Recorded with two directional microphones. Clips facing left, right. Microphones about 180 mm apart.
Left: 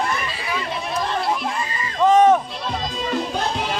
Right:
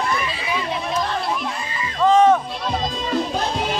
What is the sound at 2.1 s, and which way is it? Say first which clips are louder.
Music: even; 20° left (ahead or behind).